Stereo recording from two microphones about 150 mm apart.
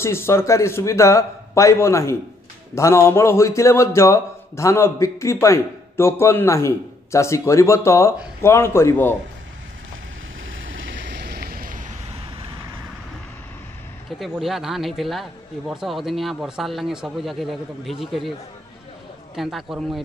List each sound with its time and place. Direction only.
0.0 s a man's voice: 15° left (ahead or behind)
11.1 s a sound: 90° right; by 11.8 s 70° right (ahead or behind)
12.4 s vehicle: 35° right (ahead or behind)
14.2 s speech: centre (ahead or behind)
19.3 s speech: centre (ahead or behind)